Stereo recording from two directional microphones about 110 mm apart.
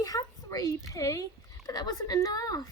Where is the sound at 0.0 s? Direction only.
35° left (ahead or behind).